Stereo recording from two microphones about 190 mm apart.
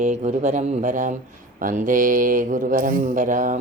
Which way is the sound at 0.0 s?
40° right (ahead or behind).